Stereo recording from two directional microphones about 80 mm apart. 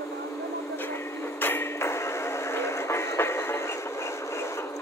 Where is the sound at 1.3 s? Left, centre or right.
Left.